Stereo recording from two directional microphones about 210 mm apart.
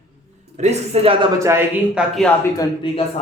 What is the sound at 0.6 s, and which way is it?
Speech, 30° right (ahead or behind).